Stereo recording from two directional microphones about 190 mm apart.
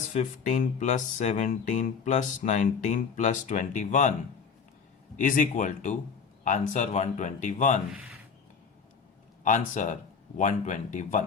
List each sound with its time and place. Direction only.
0.1 s speech: 40° left (ahead or behind)
5.1 s speech: 45° left (ahead or behind)
9.4 s speech: 40° left (ahead or behind)